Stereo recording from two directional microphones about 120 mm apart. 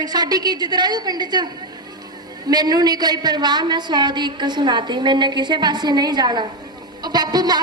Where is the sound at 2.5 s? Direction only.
35° right (ahead or behind).